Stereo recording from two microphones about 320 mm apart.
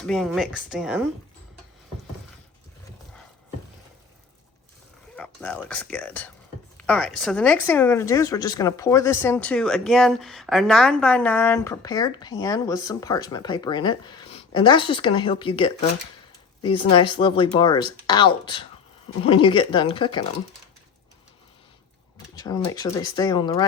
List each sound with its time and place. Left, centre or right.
0.0 s speech: centre
5.1 s speech: centre
22.4 s speech: centre